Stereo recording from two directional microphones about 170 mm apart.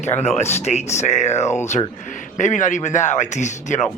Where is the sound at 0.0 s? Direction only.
40° left (ahead or behind).